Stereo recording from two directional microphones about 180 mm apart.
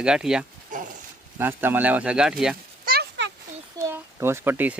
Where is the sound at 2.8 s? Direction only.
60° right (ahead or behind).